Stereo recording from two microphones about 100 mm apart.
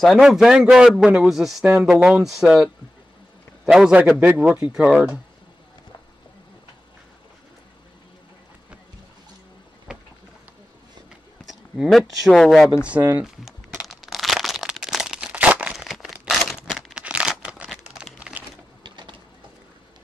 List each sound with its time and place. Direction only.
0.2 s a man's voice: 5° right (ahead or behind)
2.2 s speech: 5° right (ahead or behind)
3.6 s a man's voice: 10° right (ahead or behind)
11.4 s speech: centre (ahead or behind)
12.8 s a man's voice: 15° right (ahead or behind)
13.2 s crumpling: 5° right (ahead or behind)
17.6 s a sound: 5° right (ahead or behind)
18.8 s printer: 50° right (ahead or behind)